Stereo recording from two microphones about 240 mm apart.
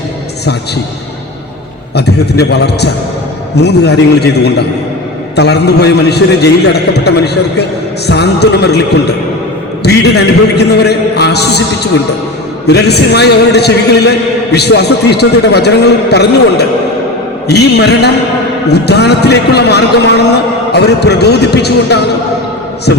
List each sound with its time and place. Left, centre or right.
2.0 s a man's voice: left